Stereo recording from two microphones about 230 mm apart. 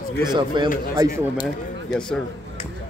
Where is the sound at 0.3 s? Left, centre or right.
Centre.